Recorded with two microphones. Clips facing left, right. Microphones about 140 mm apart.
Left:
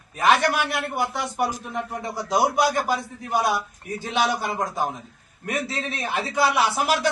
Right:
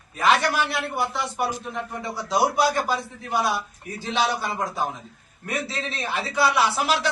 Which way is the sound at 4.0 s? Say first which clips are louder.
Left 1 dB; 50° left (ahead or behind).